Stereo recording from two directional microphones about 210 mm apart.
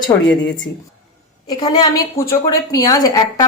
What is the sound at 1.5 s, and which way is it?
A woman's voice, 20° left (ahead or behind).